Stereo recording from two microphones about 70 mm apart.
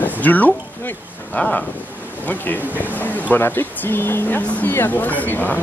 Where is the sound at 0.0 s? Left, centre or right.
Left.